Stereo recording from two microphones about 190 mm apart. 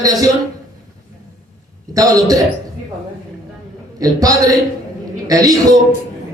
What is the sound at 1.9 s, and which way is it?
Speech, 20° right (ahead or behind).